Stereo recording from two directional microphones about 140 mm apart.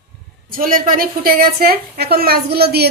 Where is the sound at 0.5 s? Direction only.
90° right.